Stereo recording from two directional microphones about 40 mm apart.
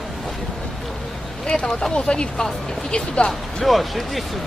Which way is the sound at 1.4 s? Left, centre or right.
Left.